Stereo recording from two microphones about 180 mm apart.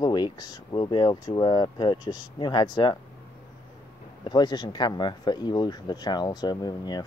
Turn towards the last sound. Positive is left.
turn(degrees=25)  # may be behind; listen again after turning